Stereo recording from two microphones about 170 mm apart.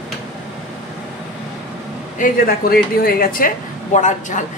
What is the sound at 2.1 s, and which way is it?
A woman's voice, 55° left (ahead or behind).